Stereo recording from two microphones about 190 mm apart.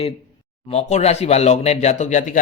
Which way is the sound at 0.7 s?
35° left (ahead or behind).